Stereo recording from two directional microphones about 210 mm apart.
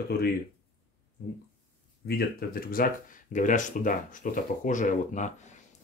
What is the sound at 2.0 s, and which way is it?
Speech, 45° left (ahead or behind).